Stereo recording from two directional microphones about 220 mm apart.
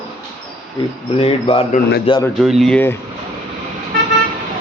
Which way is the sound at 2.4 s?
Centre (ahead or behind).